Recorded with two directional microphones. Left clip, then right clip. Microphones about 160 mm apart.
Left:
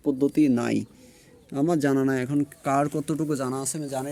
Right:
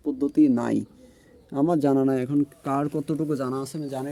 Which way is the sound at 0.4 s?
20° right (ahead or behind).